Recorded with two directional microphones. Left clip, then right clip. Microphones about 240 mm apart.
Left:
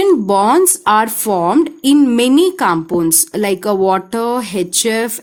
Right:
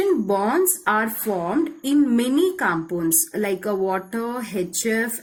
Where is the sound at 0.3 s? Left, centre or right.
Left.